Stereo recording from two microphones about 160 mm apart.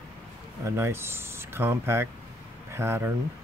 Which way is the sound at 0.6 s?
15° right (ahead or behind).